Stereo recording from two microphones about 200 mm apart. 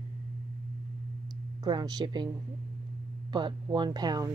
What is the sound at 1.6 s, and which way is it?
Speech, 20° right (ahead or behind).